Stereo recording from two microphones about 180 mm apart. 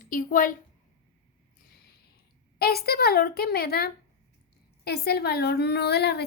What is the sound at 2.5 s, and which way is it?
A woman's voice, 60° left (ahead or behind).